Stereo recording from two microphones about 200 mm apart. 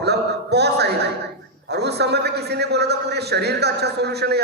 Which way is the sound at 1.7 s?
55° right (ahead or behind).